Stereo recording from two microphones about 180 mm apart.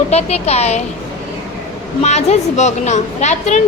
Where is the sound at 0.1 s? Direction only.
35° left (ahead or behind).